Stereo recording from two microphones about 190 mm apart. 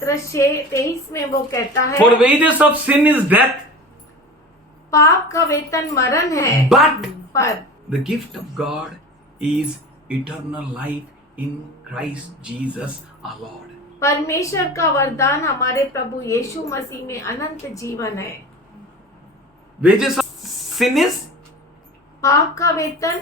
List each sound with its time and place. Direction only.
0.0 s a woman's voice: 15° left (ahead or behind)
2.2 s speech: 5° right (ahead or behind)
4.9 s a woman's voice: 15° left (ahead or behind)
6.7 s speech: centre (ahead or behind)
7.3 s a woman's voice: 15° left (ahead or behind)
7.9 s speech: centre (ahead or behind)
11.9 s speech: 5° right (ahead or behind)
14.0 s a woman's voice: 15° left (ahead or behind)
19.8 s a sound: centre (ahead or behind)
22.2 s a woman's voice: 15° left (ahead or behind)